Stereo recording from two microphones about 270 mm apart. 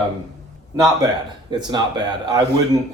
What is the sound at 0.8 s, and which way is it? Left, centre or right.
Speech, centre.